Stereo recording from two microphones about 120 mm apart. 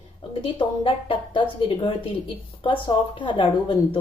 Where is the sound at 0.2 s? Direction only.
45° left (ahead or behind).